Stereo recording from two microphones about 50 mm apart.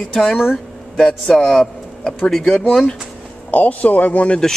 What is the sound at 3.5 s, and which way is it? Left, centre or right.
Speech, left.